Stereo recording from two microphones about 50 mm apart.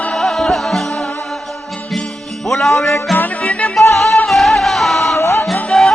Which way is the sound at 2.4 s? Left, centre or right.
Centre.